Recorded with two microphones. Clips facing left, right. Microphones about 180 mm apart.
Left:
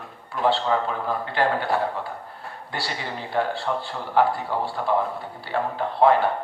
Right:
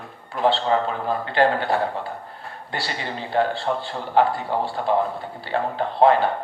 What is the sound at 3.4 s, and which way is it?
A man's voice, 25° right (ahead or behind).